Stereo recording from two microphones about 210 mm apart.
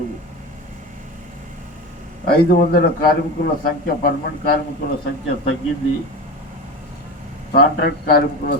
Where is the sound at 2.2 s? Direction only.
50° left (ahead or behind).